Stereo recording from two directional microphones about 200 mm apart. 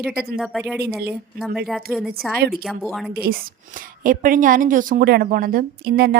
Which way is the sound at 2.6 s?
Centre (ahead or behind).